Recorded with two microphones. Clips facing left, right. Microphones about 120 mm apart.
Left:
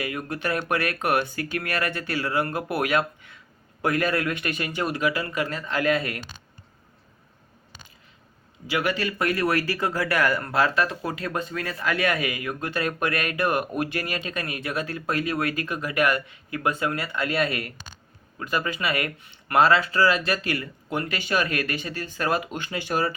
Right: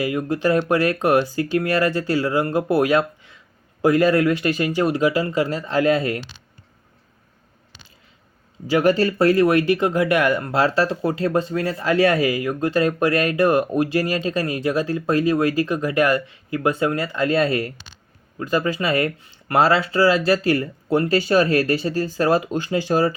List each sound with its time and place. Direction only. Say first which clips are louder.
0.0 s speech: right 8 dB; 25° right (ahead or behind)
6.1 s speech: right 7 dB; 45° left (ahead or behind)
8.6 s speech: right 9 dB; 40° right (ahead or behind)